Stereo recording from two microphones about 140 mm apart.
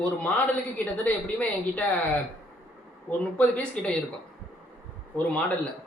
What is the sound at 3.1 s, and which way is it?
Speech, 10° left (ahead or behind).